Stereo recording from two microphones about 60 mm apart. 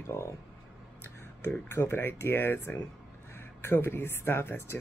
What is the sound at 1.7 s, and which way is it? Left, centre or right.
Speech, left.